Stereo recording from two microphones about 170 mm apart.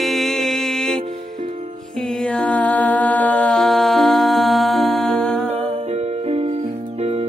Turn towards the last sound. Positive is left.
turn(degrees=-40)  # may be behind; listen again after turning